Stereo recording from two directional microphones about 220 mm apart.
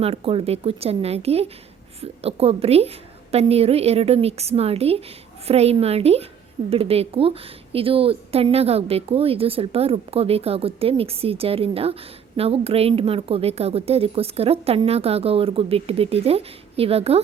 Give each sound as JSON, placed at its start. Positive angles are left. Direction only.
{"t": 0.0, "sound": "a woman's voice", "side_deg": -25}